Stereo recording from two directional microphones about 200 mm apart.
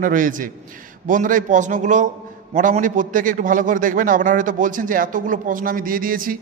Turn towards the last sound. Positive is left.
turn(degrees=-45)  # may be behind; listen again after turning